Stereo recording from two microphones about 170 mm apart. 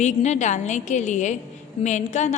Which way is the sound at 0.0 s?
45° left (ahead or behind).